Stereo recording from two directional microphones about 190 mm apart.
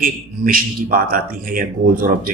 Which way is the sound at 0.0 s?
50° right (ahead or behind).